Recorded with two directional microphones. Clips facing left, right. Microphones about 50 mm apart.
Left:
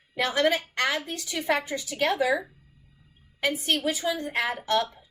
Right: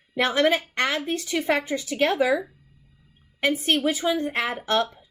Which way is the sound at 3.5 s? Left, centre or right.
Right.